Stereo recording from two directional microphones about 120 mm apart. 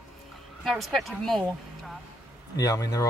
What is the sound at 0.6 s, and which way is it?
Speech, centre (ahead or behind).